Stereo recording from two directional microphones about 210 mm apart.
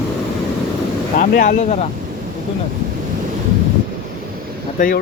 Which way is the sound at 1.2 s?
40° left (ahead or behind).